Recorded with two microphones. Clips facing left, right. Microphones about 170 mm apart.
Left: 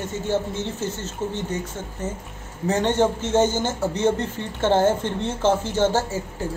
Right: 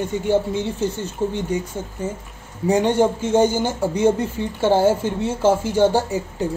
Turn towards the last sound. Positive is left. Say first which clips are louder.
# right 4 dB
turn(degrees=-15)  # may be behind; listen again after turning